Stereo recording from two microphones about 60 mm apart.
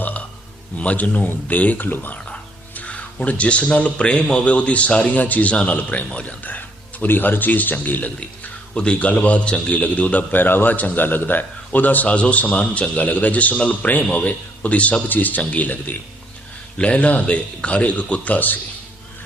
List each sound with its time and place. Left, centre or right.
0.0 s a sound: left
0.8 s a man's voice: left
8.7 s a man's voice: centre